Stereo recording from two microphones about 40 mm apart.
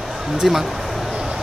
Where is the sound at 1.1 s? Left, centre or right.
Centre.